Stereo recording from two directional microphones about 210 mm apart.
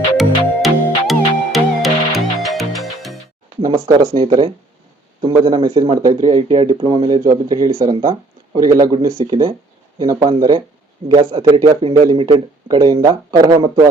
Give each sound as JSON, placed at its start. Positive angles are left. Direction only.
{"t": 0.2, "sound": "music", "side_deg": 0}
{"t": 3.8, "sound": "a man's voice", "side_deg": -15}